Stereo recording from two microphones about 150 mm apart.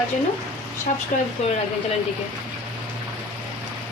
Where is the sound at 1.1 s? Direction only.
65° left (ahead or behind).